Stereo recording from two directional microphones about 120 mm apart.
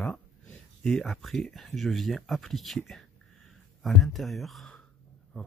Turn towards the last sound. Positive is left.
turn(degrees=5)  # may be behind; listen again after turning